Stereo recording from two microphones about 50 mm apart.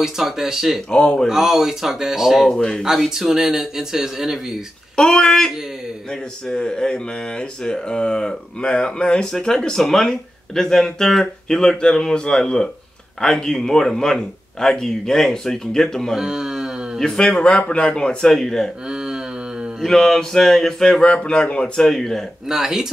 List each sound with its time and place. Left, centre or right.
0.0 s speech: centre
0.9 s a man's voice: centre
1.2 s speech: centre
2.4 s speech: centre
3.0 s speech: centre
4.9 s speech: centre
6.5 s speech: centre
16.2 s speech: centre
17.0 s a man's voice: centre
18.2 s speech: centre
19.8 s speech: centre
21.0 s a man's voice: left
21.8 s speech: centre
22.5 s speech: centre